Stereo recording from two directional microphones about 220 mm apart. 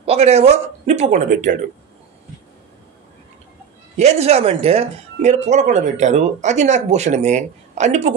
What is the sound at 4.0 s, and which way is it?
Speech, 30° right (ahead or behind).